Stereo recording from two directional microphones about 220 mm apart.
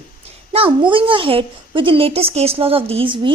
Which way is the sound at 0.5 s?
25° right (ahead or behind).